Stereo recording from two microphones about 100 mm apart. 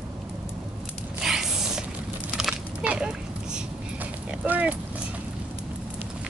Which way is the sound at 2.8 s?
15° right (ahead or behind).